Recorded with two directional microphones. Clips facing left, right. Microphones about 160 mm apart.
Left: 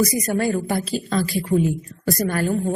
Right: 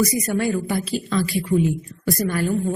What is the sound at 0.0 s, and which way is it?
A woman's voice, 35° left (ahead or behind).